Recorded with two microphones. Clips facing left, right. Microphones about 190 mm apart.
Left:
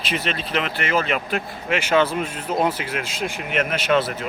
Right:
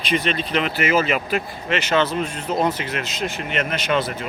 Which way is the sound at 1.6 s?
10° left (ahead or behind).